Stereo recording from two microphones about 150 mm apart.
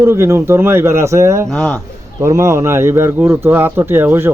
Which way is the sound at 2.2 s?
20° right (ahead or behind).